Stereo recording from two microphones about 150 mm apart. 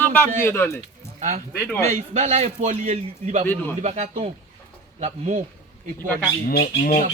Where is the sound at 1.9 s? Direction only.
50° right (ahead or behind).